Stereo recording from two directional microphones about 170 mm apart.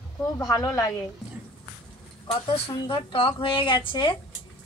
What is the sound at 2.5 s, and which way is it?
Speech, 35° left (ahead or behind).